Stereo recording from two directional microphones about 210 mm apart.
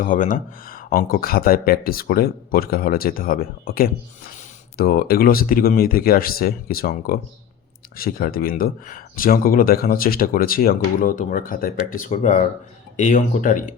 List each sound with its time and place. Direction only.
0.0 s speech: 40° left (ahead or behind)